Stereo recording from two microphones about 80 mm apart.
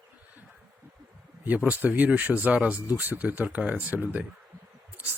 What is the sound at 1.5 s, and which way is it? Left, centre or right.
Speech, centre.